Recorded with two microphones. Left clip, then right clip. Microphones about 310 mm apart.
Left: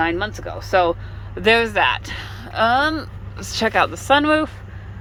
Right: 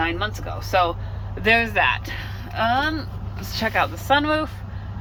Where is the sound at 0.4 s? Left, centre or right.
Left.